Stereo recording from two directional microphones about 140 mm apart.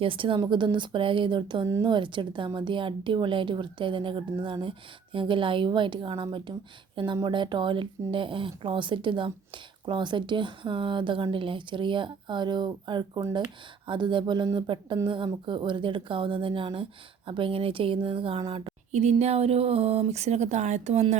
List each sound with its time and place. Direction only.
0.0 s speech: 40° right (ahead or behind)
18.9 s speech: 50° right (ahead or behind)